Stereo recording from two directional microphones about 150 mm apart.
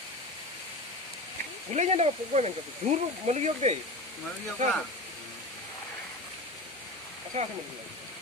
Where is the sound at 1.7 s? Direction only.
50° right (ahead or behind).